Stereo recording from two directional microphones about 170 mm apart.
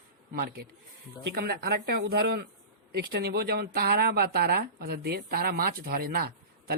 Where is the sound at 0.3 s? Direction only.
65° right (ahead or behind).